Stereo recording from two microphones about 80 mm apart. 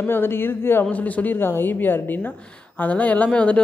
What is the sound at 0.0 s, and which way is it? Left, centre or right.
Speech, left.